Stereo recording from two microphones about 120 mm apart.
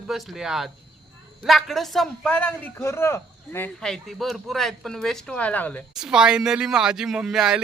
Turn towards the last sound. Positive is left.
turn(degrees=-5)  # may be behind; listen again after turning